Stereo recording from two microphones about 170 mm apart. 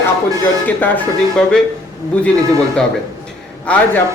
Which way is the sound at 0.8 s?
5° left (ahead or behind).